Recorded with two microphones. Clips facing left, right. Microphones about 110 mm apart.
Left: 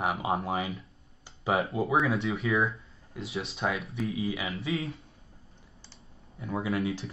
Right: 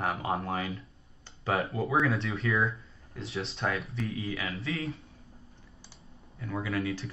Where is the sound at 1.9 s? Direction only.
Centre (ahead or behind).